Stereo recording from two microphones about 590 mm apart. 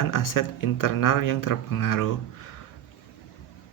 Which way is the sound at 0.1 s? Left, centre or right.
Left.